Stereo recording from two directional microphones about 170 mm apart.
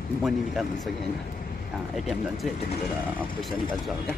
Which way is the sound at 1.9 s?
Centre (ahead or behind).